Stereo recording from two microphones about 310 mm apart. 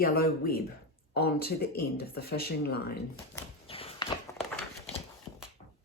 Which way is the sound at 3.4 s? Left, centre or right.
Centre.